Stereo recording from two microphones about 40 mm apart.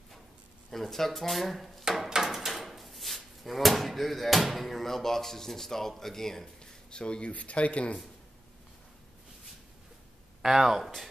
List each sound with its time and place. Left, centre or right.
0.7 s speech: centre
1.9 s a sound: centre
2.2 s speech: centre
6.9 s speech: left
10.4 s speech: centre